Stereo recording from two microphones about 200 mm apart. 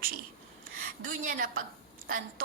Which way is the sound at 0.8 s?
45° right (ahead or behind).